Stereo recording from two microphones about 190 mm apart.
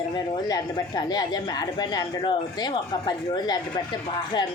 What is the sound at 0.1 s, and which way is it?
Speech, 20° left (ahead or behind).